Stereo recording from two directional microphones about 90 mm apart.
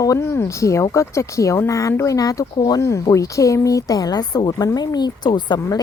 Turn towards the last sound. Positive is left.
turn(degrees=55)  # may be behind; listen again after turning